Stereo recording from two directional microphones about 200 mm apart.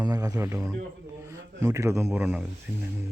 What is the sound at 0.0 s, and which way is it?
Speech, 20° right (ahead or behind).